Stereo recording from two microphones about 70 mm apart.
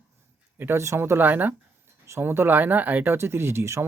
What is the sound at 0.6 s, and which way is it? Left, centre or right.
Speech, right.